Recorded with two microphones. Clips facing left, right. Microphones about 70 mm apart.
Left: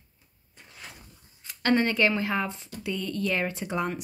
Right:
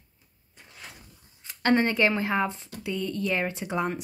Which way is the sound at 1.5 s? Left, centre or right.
Right.